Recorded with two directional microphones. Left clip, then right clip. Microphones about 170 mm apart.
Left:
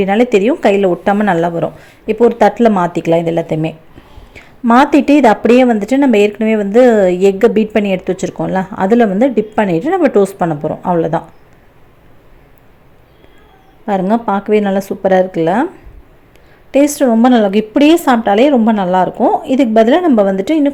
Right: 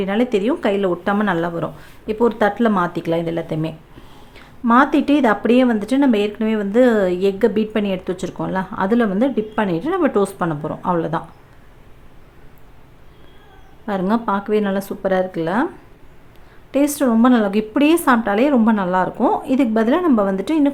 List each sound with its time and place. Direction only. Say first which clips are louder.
0.0 s a woman's voice: left 8 dB; 20° left (ahead or behind)
13.8 s a woman's voice: left 6 dB; 20° left (ahead or behind)
16.7 s a woman's voice: left 7 dB; 20° left (ahead or behind)